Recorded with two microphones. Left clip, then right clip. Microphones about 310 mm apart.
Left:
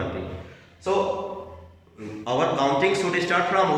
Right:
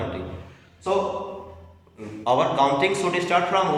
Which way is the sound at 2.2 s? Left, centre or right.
Centre.